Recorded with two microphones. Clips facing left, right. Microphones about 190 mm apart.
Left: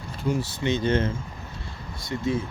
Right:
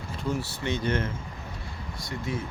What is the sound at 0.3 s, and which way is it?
Speech, 20° left (ahead or behind).